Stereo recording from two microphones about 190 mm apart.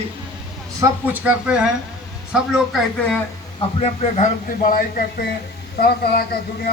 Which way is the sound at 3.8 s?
35° left (ahead or behind).